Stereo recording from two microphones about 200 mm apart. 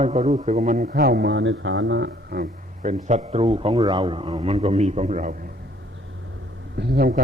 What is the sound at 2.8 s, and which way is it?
A man's voice, 35° right (ahead or behind).